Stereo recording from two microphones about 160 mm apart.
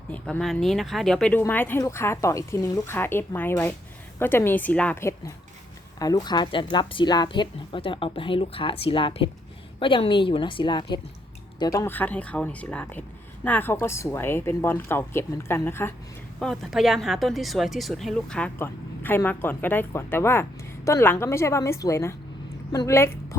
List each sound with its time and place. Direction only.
0.1 s speech: 5° left (ahead or behind)
16.4 s speech: centre (ahead or behind); by 23.4 s 15° left (ahead or behind)